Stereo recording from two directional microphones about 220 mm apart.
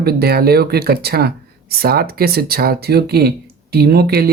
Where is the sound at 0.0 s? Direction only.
45° right (ahead or behind).